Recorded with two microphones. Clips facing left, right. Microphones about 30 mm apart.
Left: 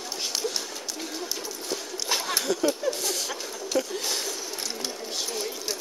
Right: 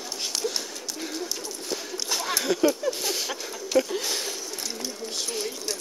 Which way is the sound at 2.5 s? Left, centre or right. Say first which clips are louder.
Right 3 dB; centre.